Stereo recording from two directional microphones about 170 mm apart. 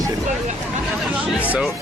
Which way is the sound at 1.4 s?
5° right (ahead or behind).